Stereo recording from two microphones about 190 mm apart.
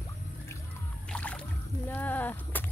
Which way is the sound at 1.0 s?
5° left (ahead or behind).